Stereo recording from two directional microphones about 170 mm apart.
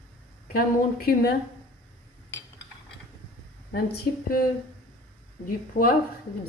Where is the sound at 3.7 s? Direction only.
65° left (ahead or behind).